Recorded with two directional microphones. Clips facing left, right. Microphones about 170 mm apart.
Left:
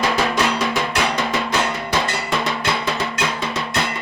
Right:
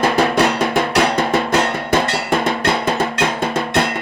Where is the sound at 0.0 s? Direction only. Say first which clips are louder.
Right 5 dB; 55° right (ahead or behind).